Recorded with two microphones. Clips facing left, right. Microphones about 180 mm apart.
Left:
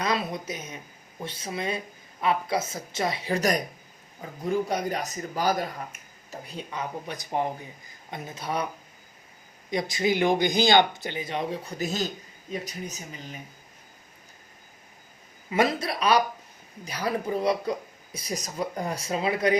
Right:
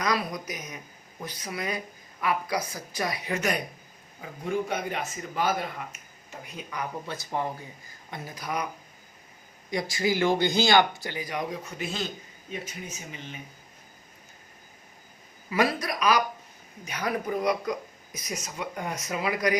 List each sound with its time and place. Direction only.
0.0 s speech: 25° left (ahead or behind)
7.3 s speech: 20° left (ahead or behind)
9.6 s speech: 20° left (ahead or behind); by 13.4 s 40° left (ahead or behind)
15.4 s speech: 25° left (ahead or behind)